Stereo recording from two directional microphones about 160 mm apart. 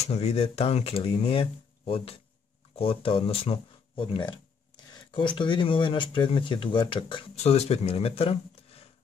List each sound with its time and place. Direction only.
0.1 s speech: 40° left (ahead or behind)